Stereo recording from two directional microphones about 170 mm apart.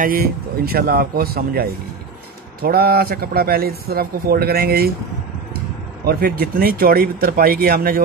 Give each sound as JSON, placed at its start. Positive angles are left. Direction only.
{"t": 0.0, "sound": "speech", "side_deg": -60}
{"t": 6.0, "sound": "speech", "side_deg": -65}